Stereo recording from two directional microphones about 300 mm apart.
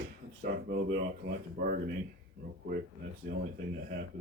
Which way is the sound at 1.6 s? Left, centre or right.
Right.